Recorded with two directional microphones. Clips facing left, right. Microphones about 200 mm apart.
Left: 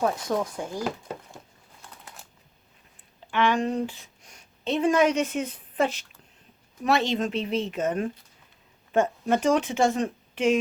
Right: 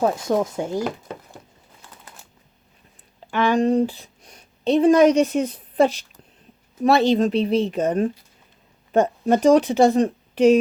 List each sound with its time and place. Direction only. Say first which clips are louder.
0.0 s speech: right 5 dB; 25° right (ahead or behind)
1.8 s typing: even; centre (ahead or behind)
3.3 s speech: right 6 dB; 35° right (ahead or behind)